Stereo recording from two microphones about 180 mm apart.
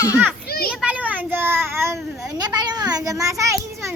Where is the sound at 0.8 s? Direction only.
5° right (ahead or behind).